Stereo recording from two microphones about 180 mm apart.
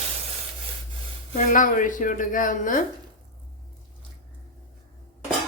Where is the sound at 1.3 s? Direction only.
45° left (ahead or behind).